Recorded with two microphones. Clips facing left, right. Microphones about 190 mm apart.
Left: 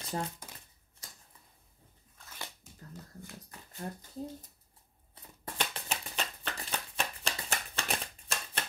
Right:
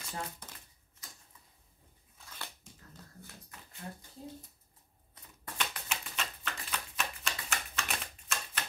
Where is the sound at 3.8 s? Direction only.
40° left (ahead or behind).